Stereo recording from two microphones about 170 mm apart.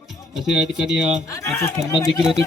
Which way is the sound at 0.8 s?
80° left.